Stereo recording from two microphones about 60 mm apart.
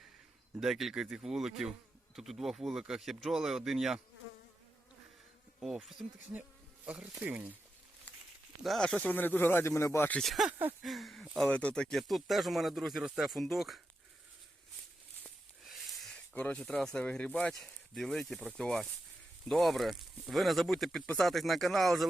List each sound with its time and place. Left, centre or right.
0.6 s speech: centre
5.5 s insect: centre
6.8 s speech: right
8.8 s speech: centre
9.0 s speech: left
10.2 s speech: centre
11.4 s speech: left
11.7 s speech: centre
11.9 s speech: centre
15.6 s a sound: centre
16.3 s speech: left
16.6 s speech: centre
17.9 s speech: centre